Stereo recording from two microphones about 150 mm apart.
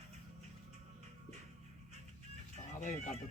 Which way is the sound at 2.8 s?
55° left (ahead or behind).